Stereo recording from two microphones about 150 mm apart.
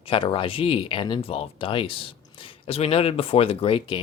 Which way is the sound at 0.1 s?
35° left (ahead or behind).